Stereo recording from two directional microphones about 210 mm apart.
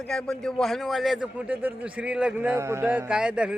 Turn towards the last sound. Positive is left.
turn(degrees=-5)  # may be behind; listen again after turning